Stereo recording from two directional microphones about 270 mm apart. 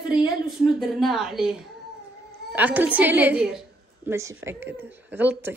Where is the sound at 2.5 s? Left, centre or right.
Centre.